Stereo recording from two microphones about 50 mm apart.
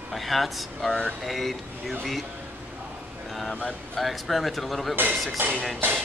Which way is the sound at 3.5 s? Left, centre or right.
Left.